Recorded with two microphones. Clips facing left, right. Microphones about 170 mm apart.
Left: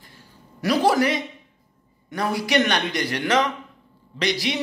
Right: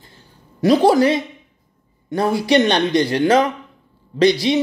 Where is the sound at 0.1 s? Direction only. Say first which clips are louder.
Even; 25° right (ahead or behind).